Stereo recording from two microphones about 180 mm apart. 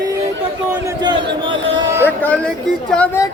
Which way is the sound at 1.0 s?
25° right (ahead or behind).